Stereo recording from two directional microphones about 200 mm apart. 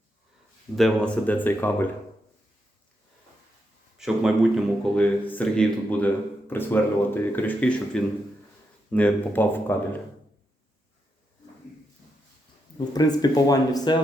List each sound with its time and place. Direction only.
0.8 s speech: 5° left (ahead or behind)
3.9 s speech: centre (ahead or behind)
12.9 s speech: 20° left (ahead or behind)